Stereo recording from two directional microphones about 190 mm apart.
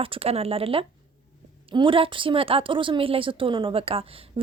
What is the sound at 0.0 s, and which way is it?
A woman's voice, 30° right (ahead or behind).